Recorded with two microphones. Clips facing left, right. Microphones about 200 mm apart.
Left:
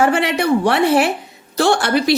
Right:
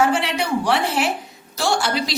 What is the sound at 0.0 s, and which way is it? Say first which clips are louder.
A woman's voice: left 4 dB; 60° left (ahead or behind).